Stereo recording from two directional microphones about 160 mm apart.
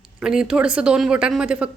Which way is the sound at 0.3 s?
5° right (ahead or behind).